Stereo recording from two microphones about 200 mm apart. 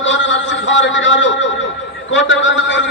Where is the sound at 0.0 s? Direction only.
70° left (ahead or behind).